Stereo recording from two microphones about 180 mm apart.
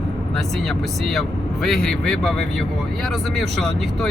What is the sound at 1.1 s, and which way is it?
Speech, centre (ahead or behind).